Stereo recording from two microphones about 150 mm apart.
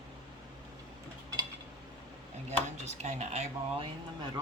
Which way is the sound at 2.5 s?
50° right (ahead or behind).